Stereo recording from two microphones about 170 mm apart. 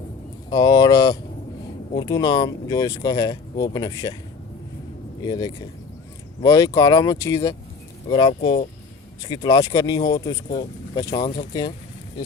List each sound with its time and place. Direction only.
0.5 s speech: 25° left (ahead or behind)
5.2 s speech: 25° left (ahead or behind)